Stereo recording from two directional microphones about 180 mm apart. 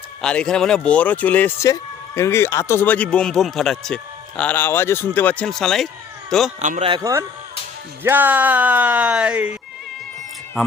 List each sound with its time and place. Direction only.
0.2 s speech: 5° left (ahead or behind)
6.6 s speech: 40° right (ahead or behind)
7.0 s speech: 15° right (ahead or behind)